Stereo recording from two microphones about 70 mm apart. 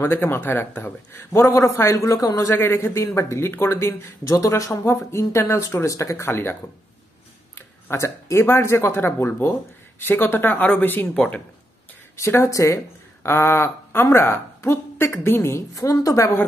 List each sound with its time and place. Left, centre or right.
0.0 s speech: left
1.5 s speech: left
2.4 s speech: left
4.3 s speech: left
7.5 s speech: left
11.1 s speech: centre
12.4 s a woman's voice: left
15.7 s speech: left